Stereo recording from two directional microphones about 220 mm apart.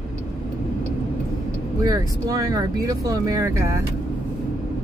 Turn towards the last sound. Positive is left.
turn(degrees=-15)  # may be behind; listen again after turning